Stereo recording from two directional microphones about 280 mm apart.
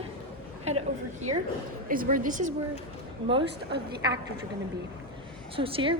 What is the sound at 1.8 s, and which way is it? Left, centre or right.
Speech, right.